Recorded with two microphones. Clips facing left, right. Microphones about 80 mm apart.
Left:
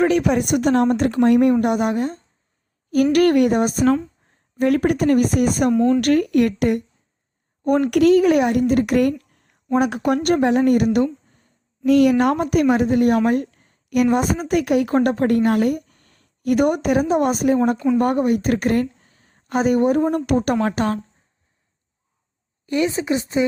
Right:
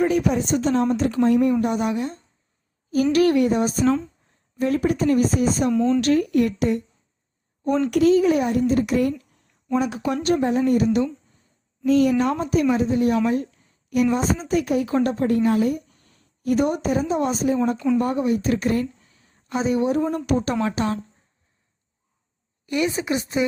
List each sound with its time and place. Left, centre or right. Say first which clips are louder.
0.0 s speech: left 3 dB; left
2.9 s speech: left 3 dB; left
4.6 s speech: left 3 dB; left
5.7 s speech: left 4 dB; centre
6.0 s speech: left 2 dB; left
7.9 s speech: left 2 dB; left
10.9 s a sound: left 3 dB; left
11.9 s a woman's voice: left 3 dB; left
22.6 s speech: left 3 dB; left